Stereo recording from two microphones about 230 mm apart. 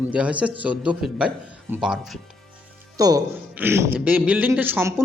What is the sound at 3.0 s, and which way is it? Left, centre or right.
Speech, centre.